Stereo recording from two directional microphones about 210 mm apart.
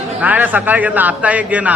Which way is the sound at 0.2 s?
5° right (ahead or behind).